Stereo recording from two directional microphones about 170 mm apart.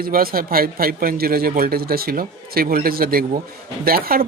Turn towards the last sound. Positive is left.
turn(degrees=-60)  # may be behind; listen again after turning